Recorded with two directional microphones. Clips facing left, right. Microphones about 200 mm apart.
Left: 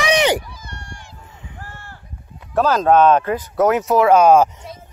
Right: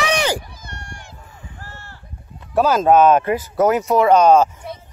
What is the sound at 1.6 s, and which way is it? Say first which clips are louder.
Run: left 1 dB; 50° left (ahead or behind).